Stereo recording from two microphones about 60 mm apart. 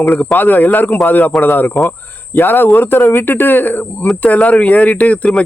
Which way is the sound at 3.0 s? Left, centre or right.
Left.